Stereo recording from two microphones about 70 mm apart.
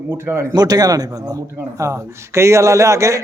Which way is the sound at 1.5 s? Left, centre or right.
Right.